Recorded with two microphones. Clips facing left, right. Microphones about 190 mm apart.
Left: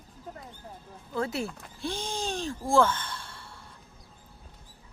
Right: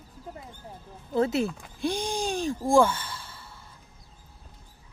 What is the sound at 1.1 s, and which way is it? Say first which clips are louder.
Speech: right 6 dB; 20° right (ahead or behind).